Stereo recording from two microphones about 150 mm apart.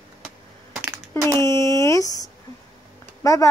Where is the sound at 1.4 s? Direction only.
20° left (ahead or behind).